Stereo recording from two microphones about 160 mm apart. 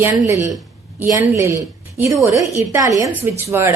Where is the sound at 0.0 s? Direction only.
20° right (ahead or behind).